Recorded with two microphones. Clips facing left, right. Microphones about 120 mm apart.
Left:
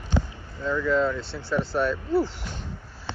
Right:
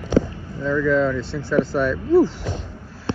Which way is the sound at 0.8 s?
30° left (ahead or behind).